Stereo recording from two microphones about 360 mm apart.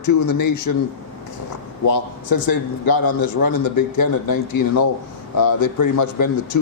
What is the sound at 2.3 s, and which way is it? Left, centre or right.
A man's voice, left.